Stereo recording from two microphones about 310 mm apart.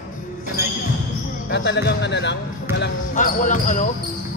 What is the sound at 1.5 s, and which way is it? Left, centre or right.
Speech, left.